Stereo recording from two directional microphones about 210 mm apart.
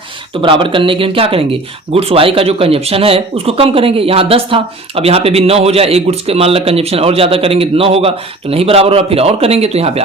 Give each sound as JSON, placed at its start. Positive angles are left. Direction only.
{"t": 0.4, "sound": "speech", "side_deg": -25}